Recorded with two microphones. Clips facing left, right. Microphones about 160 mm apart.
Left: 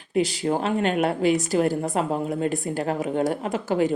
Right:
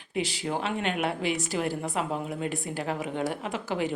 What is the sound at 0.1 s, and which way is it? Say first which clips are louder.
Speech: left 7 dB; 40° left (ahead or behind).